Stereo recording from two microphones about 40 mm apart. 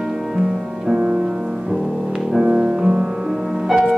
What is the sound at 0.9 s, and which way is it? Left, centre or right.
Music, right.